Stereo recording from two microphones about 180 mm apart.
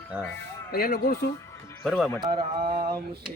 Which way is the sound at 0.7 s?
60° left (ahead or behind).